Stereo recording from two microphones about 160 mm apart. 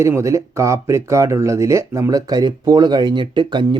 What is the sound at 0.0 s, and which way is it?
Speech, 20° right (ahead or behind).